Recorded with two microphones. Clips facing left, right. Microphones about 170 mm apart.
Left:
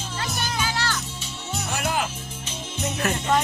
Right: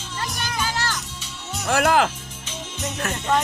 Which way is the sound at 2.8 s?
10° left (ahead or behind).